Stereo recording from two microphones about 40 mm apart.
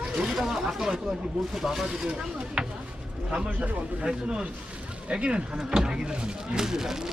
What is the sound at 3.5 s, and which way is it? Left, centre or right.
Speech, right.